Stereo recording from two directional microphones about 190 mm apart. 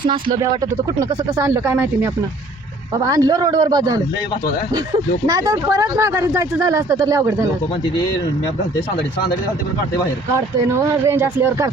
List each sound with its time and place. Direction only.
0.1 s speech: 25° right (ahead or behind)
5.2 s speech: 20° right (ahead or behind)
10.7 s speech: 15° right (ahead or behind)